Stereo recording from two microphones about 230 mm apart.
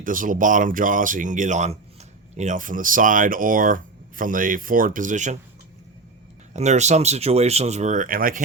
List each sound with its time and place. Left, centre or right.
0.0 s speech: right
6.5 s speech: right